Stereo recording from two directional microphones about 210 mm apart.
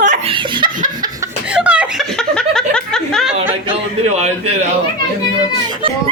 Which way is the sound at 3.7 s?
30° right (ahead or behind).